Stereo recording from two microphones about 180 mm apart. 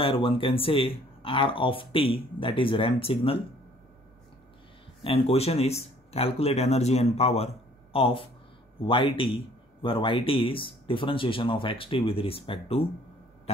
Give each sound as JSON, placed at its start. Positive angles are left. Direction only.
{"t": 0.0, "sound": "speech", "side_deg": 30}
{"t": 5.0, "sound": "speech", "side_deg": 35}